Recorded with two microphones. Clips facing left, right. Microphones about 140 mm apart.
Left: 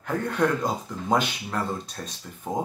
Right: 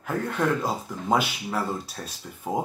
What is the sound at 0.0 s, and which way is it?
Speech, 5° right (ahead or behind).